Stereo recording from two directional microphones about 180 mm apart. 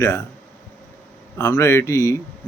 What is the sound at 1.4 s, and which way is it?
Speech, 15° left (ahead or behind).